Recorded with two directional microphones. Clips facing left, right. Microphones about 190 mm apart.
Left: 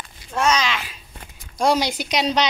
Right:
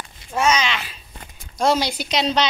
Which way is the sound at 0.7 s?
10° left (ahead or behind).